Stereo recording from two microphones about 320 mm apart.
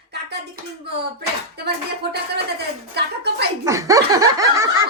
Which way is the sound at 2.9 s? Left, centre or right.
Right.